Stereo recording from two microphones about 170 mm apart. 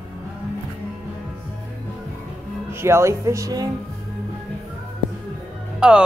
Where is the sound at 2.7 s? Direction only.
15° right (ahead or behind).